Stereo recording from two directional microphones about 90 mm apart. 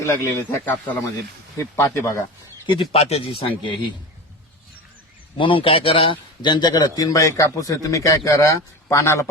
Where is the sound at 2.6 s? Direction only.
85° left; by 3.9 s 65° left (ahead or behind).